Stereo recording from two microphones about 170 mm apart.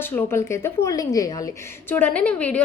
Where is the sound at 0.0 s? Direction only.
15° left (ahead or behind).